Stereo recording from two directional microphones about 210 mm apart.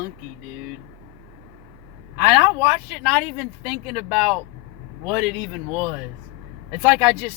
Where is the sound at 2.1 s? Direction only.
15° right (ahead or behind).